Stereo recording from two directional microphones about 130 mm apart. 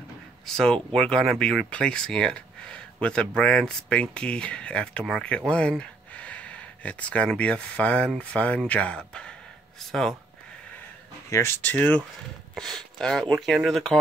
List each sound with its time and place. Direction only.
0.5 s speech: 5° left (ahead or behind)
11.2 s speech: 20° left (ahead or behind); by 13.9 s centre (ahead or behind)